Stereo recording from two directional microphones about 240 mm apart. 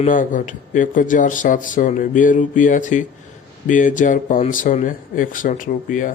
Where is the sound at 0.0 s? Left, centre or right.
Left.